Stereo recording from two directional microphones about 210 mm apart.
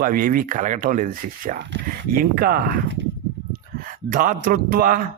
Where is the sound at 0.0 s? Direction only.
45° right (ahead or behind).